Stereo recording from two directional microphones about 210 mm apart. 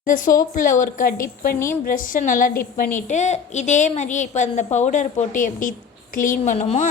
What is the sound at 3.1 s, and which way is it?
A woman's voice, 35° left (ahead or behind).